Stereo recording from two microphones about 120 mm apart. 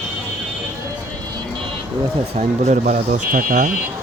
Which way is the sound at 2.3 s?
70° right (ahead or behind).